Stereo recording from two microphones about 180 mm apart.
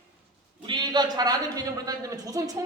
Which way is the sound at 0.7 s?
25° right (ahead or behind).